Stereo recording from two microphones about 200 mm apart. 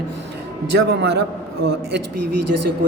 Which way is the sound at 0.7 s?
60° right (ahead or behind).